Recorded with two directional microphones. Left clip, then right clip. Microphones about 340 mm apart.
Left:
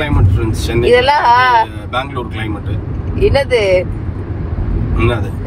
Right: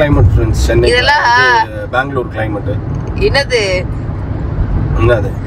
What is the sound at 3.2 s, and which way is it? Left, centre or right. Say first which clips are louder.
Speech: even; centre.